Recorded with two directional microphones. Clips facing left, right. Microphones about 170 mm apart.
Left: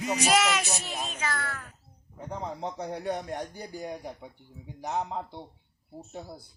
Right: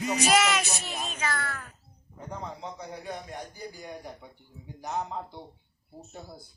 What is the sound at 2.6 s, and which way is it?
A man's voice, 60° left (ahead or behind).